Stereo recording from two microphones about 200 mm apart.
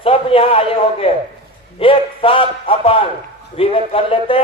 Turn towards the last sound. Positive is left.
turn(degrees=25)  # may be behind; listen again after turning